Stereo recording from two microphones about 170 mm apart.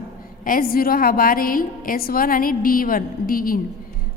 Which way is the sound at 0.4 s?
60° left (ahead or behind).